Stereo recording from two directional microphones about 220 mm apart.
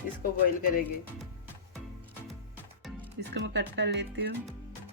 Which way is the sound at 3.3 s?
50° right (ahead or behind).